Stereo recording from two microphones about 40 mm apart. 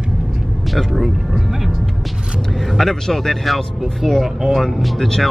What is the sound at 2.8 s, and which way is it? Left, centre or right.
Speech, centre.